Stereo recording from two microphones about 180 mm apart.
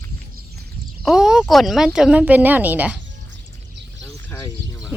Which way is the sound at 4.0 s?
20° left (ahead or behind).